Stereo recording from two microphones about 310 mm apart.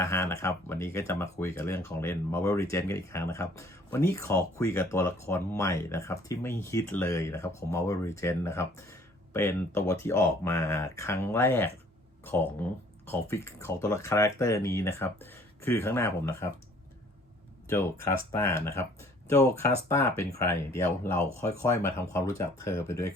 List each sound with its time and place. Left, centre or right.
0.0 s speech: centre
17.7 s speech: centre